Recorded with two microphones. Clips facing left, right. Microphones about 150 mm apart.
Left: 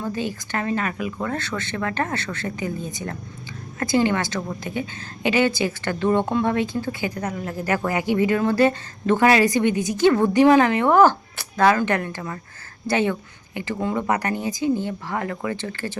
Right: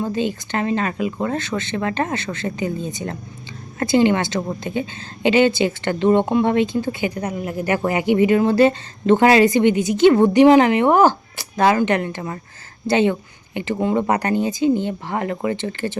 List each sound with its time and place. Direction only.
0.0 s a woman's voice: 20° right (ahead or behind)